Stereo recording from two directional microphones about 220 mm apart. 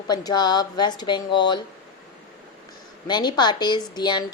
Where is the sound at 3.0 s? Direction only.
20° left (ahead or behind).